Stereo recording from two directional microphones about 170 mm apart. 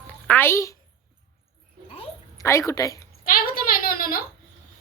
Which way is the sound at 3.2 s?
55° left (ahead or behind).